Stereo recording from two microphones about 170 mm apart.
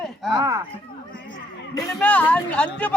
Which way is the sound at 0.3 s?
20° right (ahead or behind).